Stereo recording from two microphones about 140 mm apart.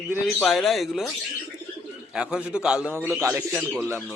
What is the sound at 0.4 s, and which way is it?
Speech, centre (ahead or behind).